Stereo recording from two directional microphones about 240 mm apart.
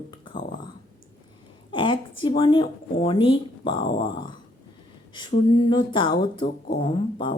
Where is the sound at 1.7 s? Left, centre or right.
Left.